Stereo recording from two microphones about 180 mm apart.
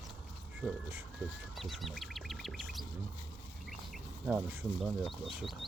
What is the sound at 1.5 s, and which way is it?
Duck, centre (ahead or behind).